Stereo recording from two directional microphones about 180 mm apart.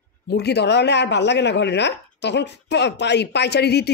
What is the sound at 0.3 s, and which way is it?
Speech, 65° left (ahead or behind).